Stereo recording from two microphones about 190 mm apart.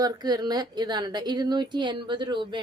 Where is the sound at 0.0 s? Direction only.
20° right (ahead or behind).